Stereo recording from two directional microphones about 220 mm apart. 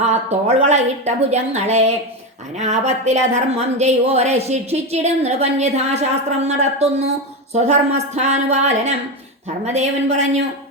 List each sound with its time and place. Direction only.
0.0 s a woman's voice: 30° right (ahead or behind)